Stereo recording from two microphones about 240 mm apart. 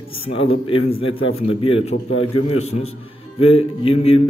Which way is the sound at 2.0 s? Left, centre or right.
Left.